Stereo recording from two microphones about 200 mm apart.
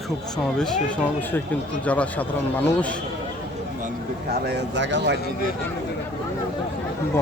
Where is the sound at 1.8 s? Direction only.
5° left (ahead or behind).